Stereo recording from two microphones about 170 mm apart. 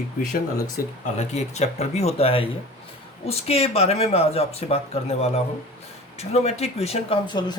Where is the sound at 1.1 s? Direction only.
40° left (ahead or behind).